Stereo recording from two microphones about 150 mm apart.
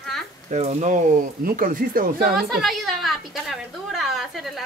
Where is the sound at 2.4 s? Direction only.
Centre (ahead or behind).